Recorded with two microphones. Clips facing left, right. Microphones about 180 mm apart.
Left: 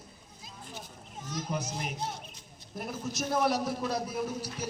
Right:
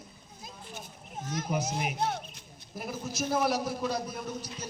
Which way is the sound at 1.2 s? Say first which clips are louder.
Right 2 dB; 55° right (ahead or behind).